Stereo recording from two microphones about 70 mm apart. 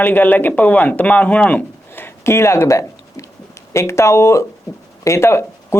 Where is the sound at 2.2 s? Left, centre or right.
Left.